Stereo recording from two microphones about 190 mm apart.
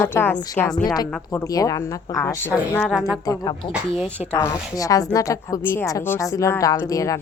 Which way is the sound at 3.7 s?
5° right (ahead or behind).